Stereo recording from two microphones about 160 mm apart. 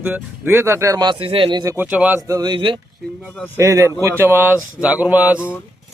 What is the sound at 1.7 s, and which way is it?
Speech, 10° right (ahead or behind).